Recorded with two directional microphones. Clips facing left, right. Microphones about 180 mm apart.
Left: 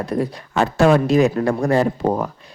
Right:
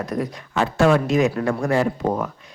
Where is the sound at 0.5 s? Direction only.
40° left (ahead or behind).